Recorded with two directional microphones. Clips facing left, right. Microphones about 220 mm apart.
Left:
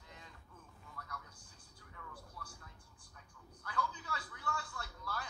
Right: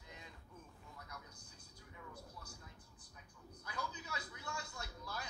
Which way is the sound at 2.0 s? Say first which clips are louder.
Even; 20° right (ahead or behind).